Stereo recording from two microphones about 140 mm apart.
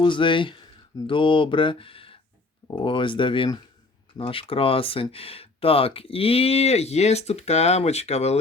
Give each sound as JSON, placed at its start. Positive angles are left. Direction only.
{"t": 0.0, "sound": "speech", "side_deg": 35}